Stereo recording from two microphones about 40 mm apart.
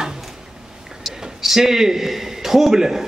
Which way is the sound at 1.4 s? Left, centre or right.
Centre.